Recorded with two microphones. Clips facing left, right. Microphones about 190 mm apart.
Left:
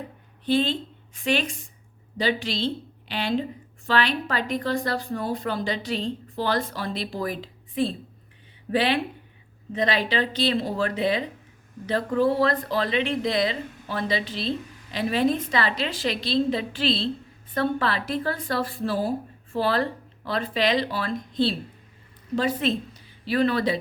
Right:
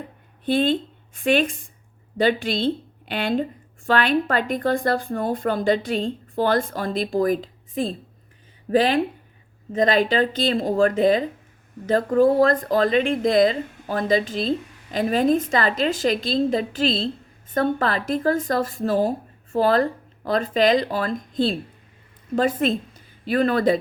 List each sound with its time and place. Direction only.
0.4 s a woman's voice: 50° right (ahead or behind)